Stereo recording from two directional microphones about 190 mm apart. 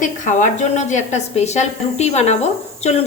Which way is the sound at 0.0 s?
40° left (ahead or behind).